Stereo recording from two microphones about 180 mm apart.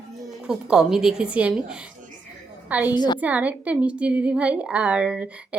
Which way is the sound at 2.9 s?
25° left (ahead or behind).